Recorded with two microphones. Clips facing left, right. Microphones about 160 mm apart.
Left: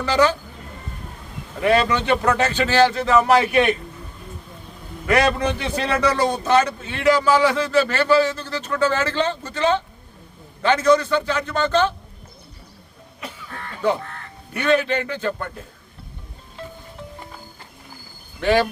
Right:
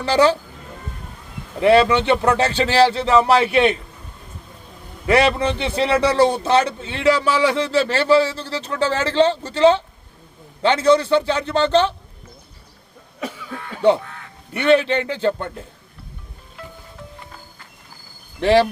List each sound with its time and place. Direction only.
0.0 s speech: 30° right (ahead or behind)
1.6 s a man's voice: 30° right (ahead or behind)
5.0 s a man's voice: 25° right (ahead or behind)
14.5 s a man's voice: 25° right (ahead or behind)
18.3 s a man's voice: 30° right (ahead or behind)